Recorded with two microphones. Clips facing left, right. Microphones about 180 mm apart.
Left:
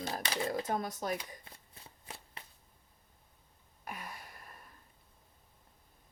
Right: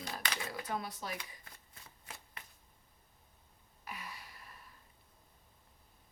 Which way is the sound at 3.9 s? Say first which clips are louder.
Left 3 dB; 50° left (ahead or behind).